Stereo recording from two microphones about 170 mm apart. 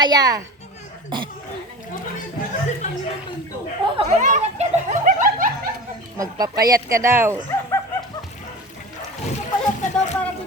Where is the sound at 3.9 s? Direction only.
40° right (ahead or behind).